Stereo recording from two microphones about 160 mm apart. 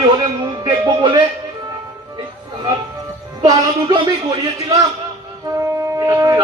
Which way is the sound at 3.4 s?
25° right (ahead or behind).